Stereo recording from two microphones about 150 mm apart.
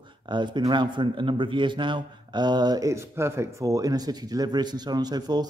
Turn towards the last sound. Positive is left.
turn(degrees=-25)  # may be behind; listen again after turning